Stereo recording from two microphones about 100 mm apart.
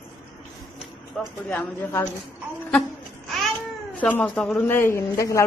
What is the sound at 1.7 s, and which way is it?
Speech, 25° left (ahead or behind).